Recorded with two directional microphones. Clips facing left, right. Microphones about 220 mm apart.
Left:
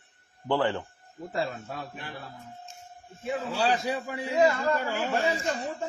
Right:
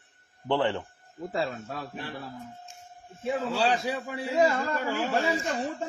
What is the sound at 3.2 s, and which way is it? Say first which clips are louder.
Speech: right 1 dB; 25° right (ahead or behind).